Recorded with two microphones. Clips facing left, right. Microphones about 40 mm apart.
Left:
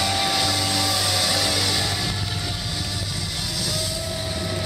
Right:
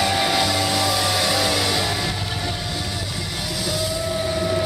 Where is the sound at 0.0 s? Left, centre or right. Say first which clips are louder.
Right 3 dB; centre.